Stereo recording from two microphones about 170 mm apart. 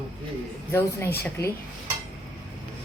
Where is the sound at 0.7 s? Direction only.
15° left (ahead or behind).